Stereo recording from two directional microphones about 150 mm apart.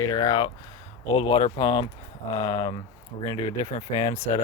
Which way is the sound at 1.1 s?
40° left (ahead or behind).